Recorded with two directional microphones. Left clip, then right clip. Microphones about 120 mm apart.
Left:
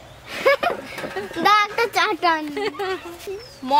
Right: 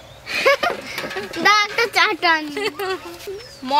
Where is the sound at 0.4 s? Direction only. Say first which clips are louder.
Right 1 dB; 15° left (ahead or behind).